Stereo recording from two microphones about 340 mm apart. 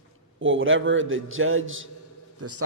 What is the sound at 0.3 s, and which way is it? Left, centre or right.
A man's voice, right.